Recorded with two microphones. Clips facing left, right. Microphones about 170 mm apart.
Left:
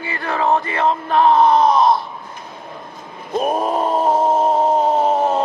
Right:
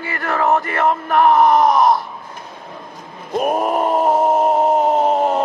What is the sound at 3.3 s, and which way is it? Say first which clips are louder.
Groan: right 1 dB; 15° right (ahead or behind).